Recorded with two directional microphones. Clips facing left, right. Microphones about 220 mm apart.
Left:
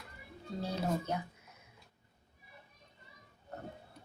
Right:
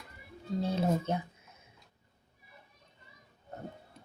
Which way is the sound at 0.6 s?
25° right (ahead or behind).